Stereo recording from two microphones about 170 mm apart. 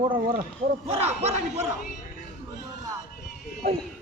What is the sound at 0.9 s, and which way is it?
Speech, 40° right (ahead or behind).